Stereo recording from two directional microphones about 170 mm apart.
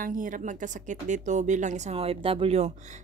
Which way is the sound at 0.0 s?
55° right (ahead or behind).